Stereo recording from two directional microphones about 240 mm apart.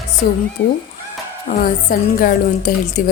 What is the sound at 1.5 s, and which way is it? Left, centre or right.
Speech, left.